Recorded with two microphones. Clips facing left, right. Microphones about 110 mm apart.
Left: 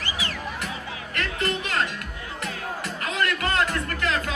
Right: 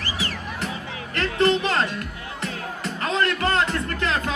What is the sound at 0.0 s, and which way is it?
Music, 40° right (ahead or behind).